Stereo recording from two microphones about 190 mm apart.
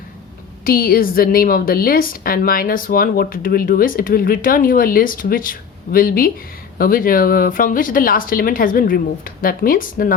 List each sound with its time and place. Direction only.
0.6 s a woman's voice: 50° left (ahead or behind)